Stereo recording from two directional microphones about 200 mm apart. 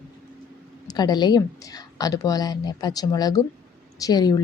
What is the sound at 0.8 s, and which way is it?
Speech, 20° left (ahead or behind).